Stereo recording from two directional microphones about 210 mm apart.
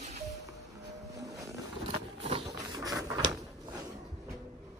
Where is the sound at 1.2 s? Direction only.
15° right (ahead or behind).